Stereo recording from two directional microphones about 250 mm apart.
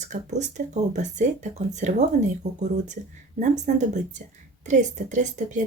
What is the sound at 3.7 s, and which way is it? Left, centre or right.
Speech, right.